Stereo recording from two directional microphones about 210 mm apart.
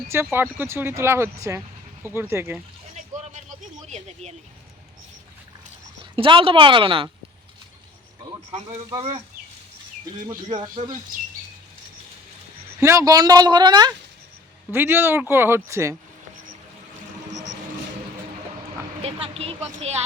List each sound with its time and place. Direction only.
0.1 s speech: 10° right (ahead or behind)
2.9 s a sound: 35° right (ahead or behind)
6.1 s speech: 25° right (ahead or behind)
8.9 s speech: 25° right (ahead or behind)
10.2 s speech: 20° right (ahead or behind)
12.8 s speech: 15° right (ahead or behind)
19.0 s speech: 30° right (ahead or behind)